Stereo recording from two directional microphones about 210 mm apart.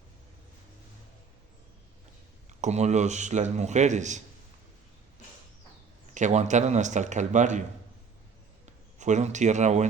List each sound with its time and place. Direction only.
2.5 s speech: 35° right (ahead or behind)
6.1 s speech: 35° right (ahead or behind)
8.6 s a man's voice: 35° right (ahead or behind)